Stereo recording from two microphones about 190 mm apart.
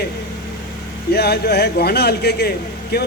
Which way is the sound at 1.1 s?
55° left (ahead or behind).